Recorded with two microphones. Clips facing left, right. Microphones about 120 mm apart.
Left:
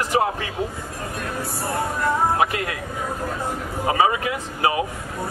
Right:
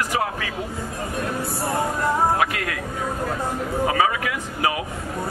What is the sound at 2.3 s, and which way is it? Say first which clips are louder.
Speech: left 1 dB; 25° left (ahead or behind).